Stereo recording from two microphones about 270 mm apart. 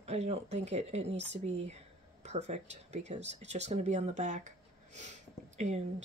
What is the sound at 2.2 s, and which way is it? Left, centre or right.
Speech, right.